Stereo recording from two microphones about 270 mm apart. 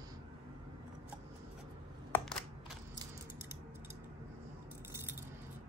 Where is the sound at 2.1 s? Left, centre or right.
Centre.